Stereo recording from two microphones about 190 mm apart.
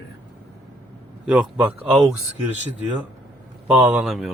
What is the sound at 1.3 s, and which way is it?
Speech, 5° right (ahead or behind).